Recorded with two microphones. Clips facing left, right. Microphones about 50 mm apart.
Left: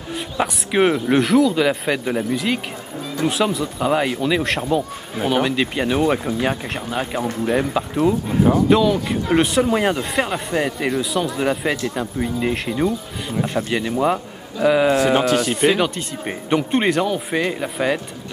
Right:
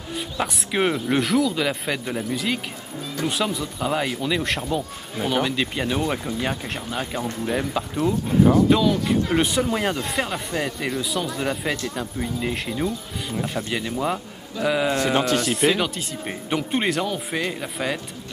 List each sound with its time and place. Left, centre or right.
0.1 s a man's voice: centre
8.3 s speech: centre
8.6 s a man's voice: centre